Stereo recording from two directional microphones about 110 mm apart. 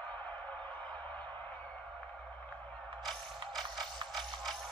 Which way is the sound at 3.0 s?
5° left (ahead or behind).